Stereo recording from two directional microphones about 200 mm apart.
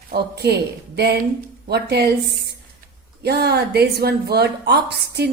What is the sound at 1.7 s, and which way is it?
A woman's voice, 55° right (ahead or behind).